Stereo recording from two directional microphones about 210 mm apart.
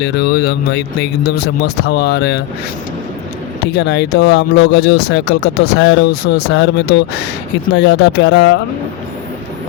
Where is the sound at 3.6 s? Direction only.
55° left (ahead or behind).